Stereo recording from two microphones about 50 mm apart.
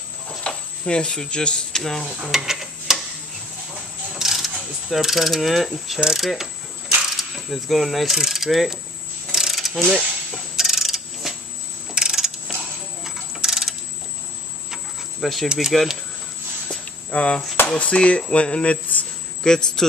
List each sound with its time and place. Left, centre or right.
0.4 s speech: centre
1.8 s stir: centre
2.2 s a sound: centre
4.1 s mechanisms: centre
6.1 s stir: centre
7.2 s mechanisms: centre
9.3 s pulleys: centre
9.8 s a sound: centre
11.9 s mechanisms: centre
12.5 s a sound: centre
15.1 s speech: centre
15.4 s speech: centre
17.1 s speech: left
19.4 s a man's voice: centre